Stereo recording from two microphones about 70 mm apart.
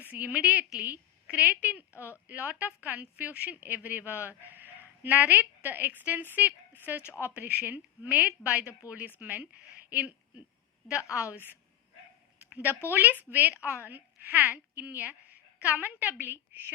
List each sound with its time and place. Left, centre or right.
0.0 s a woman's voice: right
12.4 s a sound: right
12.9 s a woman's voice: right